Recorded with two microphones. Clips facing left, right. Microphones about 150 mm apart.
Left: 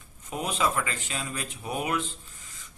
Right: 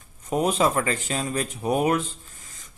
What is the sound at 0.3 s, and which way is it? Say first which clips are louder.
Speech: right 7 dB; 40° right (ahead or behind).